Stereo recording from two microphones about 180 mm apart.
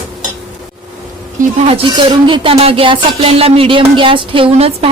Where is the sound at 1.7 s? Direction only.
30° right (ahead or behind).